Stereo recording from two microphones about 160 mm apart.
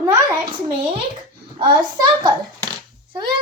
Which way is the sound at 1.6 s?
30° right (ahead or behind).